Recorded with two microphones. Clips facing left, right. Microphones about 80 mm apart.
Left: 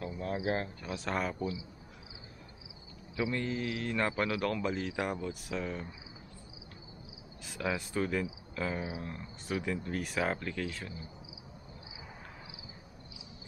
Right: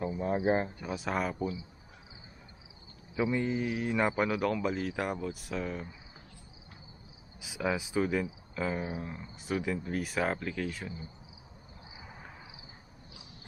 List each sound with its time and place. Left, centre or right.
0.4 s speech: centre
0.9 s a man's voice: centre
3.2 s a man's voice: centre
7.4 s a man's voice: centre